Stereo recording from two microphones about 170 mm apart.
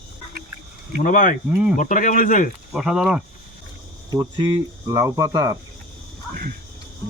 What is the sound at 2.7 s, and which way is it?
Speech, centre (ahead or behind).